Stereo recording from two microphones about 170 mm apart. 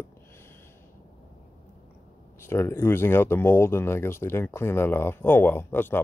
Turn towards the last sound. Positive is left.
turn(degrees=15)  # may be behind; listen again after turning